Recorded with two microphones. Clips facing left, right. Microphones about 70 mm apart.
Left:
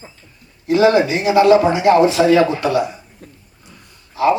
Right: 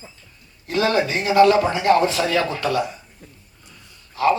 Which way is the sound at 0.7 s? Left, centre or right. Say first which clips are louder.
Left 7 dB; left.